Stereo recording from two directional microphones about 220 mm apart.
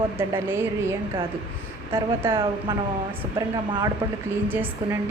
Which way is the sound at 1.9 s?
10° right (ahead or behind).